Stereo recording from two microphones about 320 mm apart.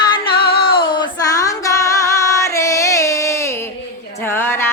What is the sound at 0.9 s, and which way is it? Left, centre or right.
Female singing, centre.